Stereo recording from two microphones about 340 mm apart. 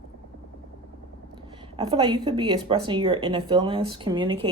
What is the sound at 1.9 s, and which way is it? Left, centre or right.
Speech, centre.